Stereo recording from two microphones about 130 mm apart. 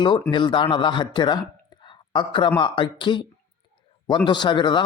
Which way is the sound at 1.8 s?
35° left (ahead or behind).